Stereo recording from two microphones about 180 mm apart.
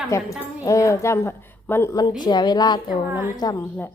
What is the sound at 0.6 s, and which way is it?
A woman's voice, 15° left (ahead or behind).